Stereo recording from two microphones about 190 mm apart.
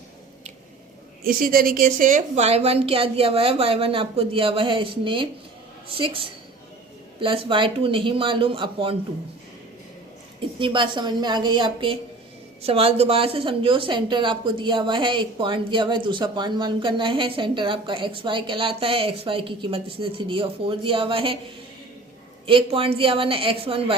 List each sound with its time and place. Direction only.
1.2 s a woman's voice: 50° right (ahead or behind); by 9.0 s 25° right (ahead or behind)
10.6 s a woman's voice: 25° right (ahead or behind)
22.4 s a woman's voice: 30° right (ahead or behind)